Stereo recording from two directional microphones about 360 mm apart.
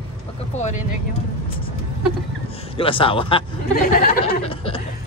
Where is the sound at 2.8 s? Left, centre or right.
Centre.